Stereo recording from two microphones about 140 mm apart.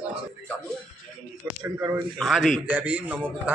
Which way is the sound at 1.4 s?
20° right (ahead or behind).